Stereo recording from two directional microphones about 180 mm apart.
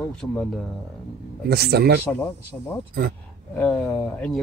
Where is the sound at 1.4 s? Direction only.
60° right (ahead or behind).